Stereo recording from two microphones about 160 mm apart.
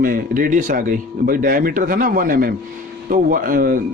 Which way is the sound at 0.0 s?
60° right (ahead or behind).